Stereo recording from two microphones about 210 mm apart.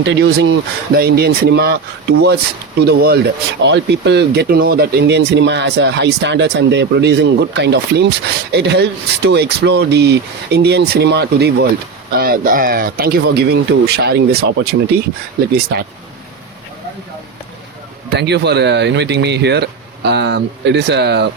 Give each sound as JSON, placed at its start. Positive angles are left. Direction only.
{"t": 0.0, "sound": "speech", "side_deg": -65}
{"t": 0.9, "sound": "speech", "side_deg": -45}
{"t": 18.1, "sound": "speech", "side_deg": -55}